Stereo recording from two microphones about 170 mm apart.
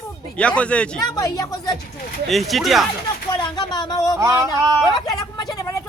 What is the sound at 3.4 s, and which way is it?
Speech, 25° left (ahead or behind).